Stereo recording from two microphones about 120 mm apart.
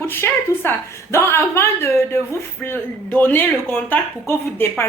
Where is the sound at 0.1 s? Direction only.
20° left (ahead or behind).